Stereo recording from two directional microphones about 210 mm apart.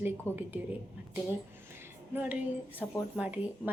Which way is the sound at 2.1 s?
10° right (ahead or behind).